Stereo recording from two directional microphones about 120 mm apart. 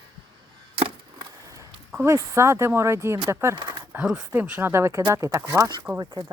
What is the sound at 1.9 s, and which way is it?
Speech, 15° right (ahead or behind).